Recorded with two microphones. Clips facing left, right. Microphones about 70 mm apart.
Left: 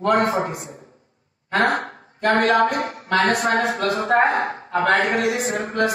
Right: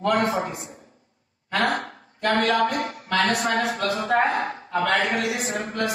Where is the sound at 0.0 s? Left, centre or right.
Left.